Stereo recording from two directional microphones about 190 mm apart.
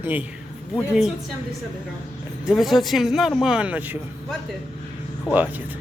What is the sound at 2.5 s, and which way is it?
A man's voice, centre (ahead or behind).